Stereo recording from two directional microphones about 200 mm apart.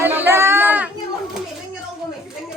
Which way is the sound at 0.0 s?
10° right (ahead or behind).